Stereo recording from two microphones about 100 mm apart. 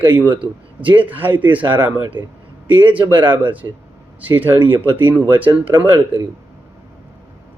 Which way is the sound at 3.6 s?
35° right (ahead or behind).